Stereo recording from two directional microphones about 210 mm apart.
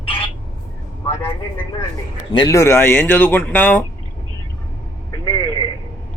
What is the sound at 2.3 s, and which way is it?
A man's voice, 15° left (ahead or behind).